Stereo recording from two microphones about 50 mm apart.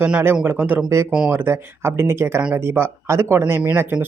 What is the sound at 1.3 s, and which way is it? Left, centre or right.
Speech, right.